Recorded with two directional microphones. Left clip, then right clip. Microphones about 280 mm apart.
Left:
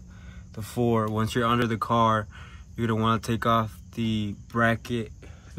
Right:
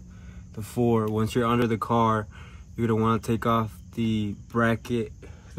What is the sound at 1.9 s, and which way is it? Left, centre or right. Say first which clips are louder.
Speech: left 2 dB; centre.